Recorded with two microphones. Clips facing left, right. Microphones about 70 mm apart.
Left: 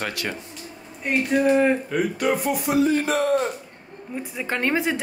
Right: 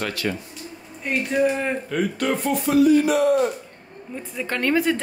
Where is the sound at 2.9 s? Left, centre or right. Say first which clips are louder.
Right 4 dB; left.